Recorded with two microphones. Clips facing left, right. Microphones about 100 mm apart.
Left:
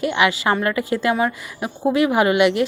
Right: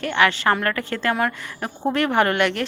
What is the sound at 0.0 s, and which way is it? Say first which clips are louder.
A woman's voice: left 1 dB; 10° left (ahead or behind).